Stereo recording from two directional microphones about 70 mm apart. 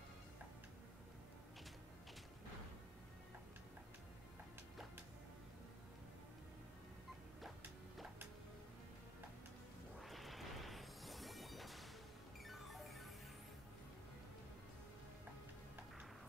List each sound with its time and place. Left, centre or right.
9.9 s music: centre